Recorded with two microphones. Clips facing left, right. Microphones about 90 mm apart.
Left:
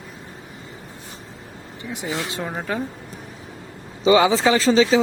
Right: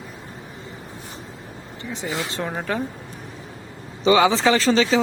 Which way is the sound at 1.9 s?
10° left (ahead or behind).